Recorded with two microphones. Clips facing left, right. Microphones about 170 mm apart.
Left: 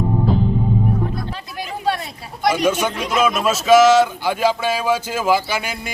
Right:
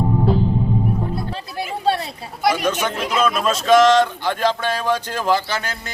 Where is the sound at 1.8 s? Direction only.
30° right (ahead or behind).